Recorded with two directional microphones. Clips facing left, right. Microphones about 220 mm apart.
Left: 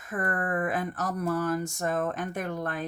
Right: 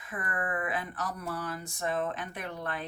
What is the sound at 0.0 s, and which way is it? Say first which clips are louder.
Speech: left 5 dB; 45° left (ahead or behind).